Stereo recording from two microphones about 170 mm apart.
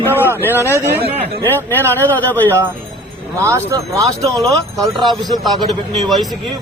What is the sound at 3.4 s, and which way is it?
Speech, 15° right (ahead or behind).